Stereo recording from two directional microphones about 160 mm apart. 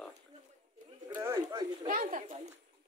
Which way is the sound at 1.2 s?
20° right (ahead or behind).